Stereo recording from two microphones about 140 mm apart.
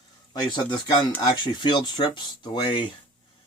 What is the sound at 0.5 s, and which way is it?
Speech, 30° left (ahead or behind).